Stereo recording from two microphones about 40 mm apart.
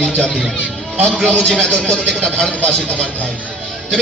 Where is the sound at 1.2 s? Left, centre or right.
Centre.